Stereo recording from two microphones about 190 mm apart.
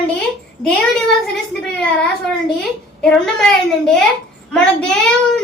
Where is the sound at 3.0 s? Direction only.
5° left (ahead or behind).